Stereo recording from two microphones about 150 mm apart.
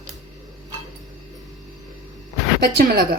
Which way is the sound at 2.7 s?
90° right.